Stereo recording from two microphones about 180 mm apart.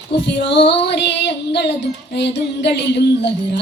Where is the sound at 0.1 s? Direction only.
75° left (ahead or behind).